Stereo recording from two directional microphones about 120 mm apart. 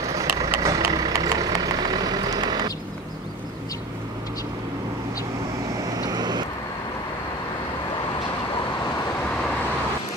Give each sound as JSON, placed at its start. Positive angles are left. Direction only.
{"t": 0.0, "sound": "vehicle", "side_deg": -25}
{"t": 6.0, "sound": "vehicle", "side_deg": -35}